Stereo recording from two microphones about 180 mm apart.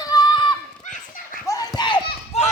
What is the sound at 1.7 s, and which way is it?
Run, 25° left (ahead or behind).